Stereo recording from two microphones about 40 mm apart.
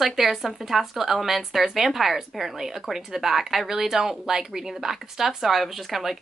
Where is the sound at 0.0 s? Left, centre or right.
Centre.